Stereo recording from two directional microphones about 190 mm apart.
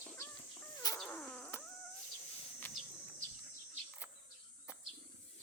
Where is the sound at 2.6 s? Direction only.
10° left (ahead or behind).